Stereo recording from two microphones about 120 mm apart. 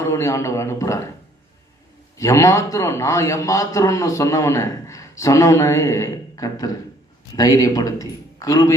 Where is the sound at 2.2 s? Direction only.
25° left (ahead or behind).